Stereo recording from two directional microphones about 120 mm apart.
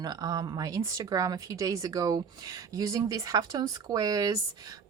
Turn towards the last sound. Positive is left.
turn(degrees=-30)  # may be behind; listen again after turning